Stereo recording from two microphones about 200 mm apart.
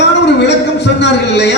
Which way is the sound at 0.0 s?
60° left (ahead or behind).